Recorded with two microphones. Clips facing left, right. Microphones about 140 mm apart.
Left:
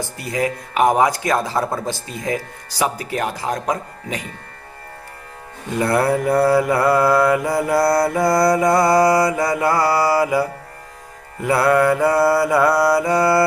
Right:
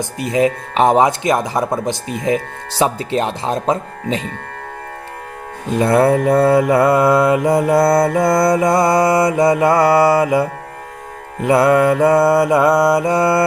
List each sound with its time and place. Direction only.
0.0 s mantra: 20° right (ahead or behind)
5.6 s mantra: 20° right (ahead or behind)